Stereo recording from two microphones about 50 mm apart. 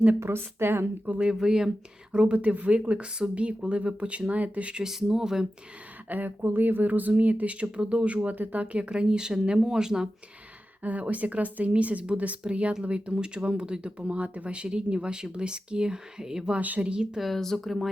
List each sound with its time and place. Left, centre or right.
0.2 s a woman's voice: right
1.0 s speech: right
1.3 s speech: centre
4.8 s speech: centre
6.1 s speech: right; by 10.1 s centre
10.8 s speech: right; by 16.6 s centre
16.6 s speech: right
16.8 s speech: centre
17.2 s speech: centre